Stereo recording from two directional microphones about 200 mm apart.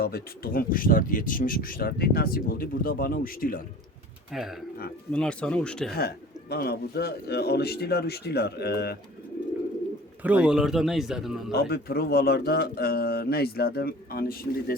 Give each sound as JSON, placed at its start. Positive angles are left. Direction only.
{"t": 0.0, "sound": "speech", "side_deg": 50}
{"t": 4.3, "sound": "speech", "side_deg": 0}
{"t": 5.9, "sound": "speech", "side_deg": 50}
{"t": 10.2, "sound": "speech", "side_deg": -5}
{"t": 11.5, "sound": "speech", "side_deg": 50}